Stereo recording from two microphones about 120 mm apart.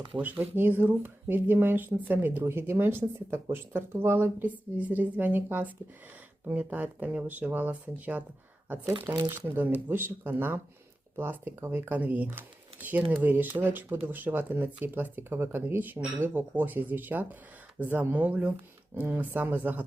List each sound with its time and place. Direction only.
0.2 s speech: 15° right (ahead or behind)
8.9 s speech: 35° right (ahead or behind)
9.6 s speech: 15° right (ahead or behind)